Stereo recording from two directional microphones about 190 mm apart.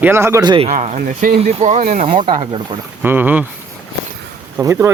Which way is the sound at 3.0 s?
10° right (ahead or behind).